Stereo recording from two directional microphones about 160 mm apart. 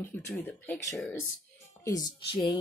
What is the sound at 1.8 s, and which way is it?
Speech, 25° left (ahead or behind).